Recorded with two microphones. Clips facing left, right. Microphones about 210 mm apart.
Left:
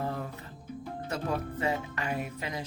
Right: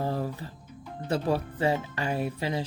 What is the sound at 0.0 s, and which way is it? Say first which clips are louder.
Music: right 4 dB; 30° right (ahead or behind).